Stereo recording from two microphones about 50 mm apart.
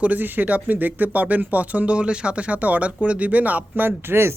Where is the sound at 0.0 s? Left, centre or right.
Right.